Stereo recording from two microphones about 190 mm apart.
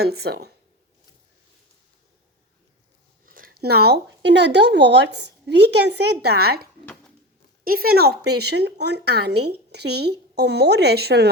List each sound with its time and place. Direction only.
0.0 s speech: 55° right (ahead or behind)
3.2 s speech: 50° right (ahead or behind)